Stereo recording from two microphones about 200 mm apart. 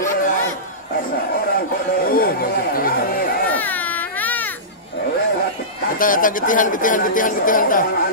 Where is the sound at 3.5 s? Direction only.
10° left (ahead or behind).